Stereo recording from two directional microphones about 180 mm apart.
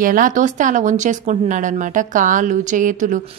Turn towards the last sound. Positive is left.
turn(degrees=-45)  # may be behind; listen again after turning